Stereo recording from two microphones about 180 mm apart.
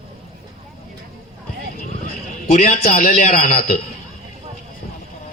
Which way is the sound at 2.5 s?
45° left (ahead or behind).